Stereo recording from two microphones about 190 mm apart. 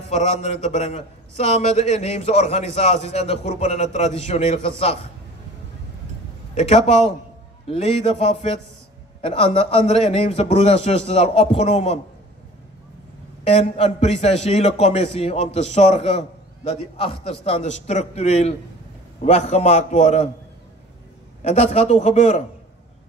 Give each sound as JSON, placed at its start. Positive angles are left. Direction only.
{"t": 0.1, "sound": "a man's voice", "side_deg": 35}
{"t": 6.5, "sound": "a man's voice", "side_deg": 35}
{"t": 13.4, "sound": "a man's voice", "side_deg": 35}
{"t": 21.5, "sound": "a man's voice", "side_deg": 35}